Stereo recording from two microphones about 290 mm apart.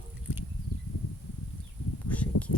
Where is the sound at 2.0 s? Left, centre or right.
Centre.